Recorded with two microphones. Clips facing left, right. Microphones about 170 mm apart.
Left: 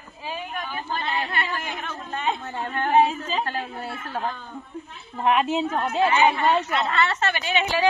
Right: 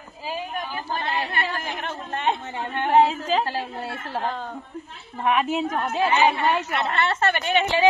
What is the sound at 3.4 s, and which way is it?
Speech, 30° right (ahead or behind).